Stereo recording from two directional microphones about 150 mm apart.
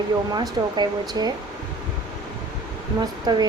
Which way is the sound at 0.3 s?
25° right (ahead or behind).